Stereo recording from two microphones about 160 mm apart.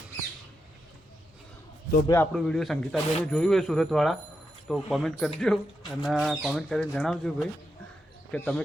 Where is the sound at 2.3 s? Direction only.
Centre (ahead or behind).